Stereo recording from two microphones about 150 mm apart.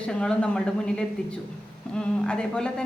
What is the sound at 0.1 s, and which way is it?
Speech, 5° left (ahead or behind).